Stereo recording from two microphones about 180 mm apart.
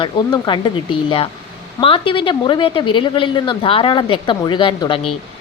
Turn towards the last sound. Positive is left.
turn(degrees=25)  # may be behind; listen again after turning